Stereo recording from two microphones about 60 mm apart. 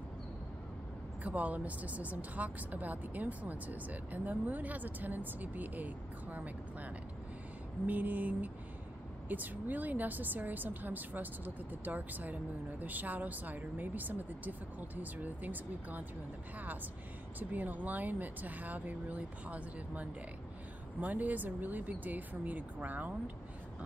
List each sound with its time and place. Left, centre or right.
1.2 s speech: right
17.4 s speech: right